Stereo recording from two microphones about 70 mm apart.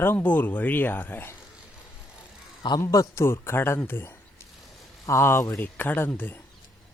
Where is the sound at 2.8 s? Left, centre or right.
Left.